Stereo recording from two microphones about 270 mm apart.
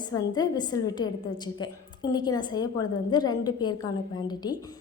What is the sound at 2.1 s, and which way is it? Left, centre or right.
A woman's voice, centre.